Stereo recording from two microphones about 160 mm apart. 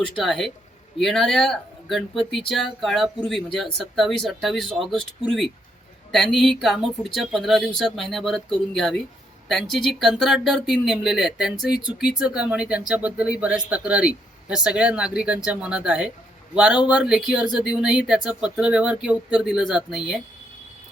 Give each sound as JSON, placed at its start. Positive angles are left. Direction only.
{"t": 0.2, "sound": "speech", "side_deg": 0}